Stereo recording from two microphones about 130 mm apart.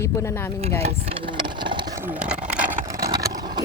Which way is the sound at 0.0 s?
20° left (ahead or behind).